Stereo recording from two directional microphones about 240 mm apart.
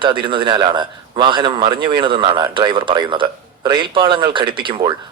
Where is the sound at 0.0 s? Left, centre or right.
Right.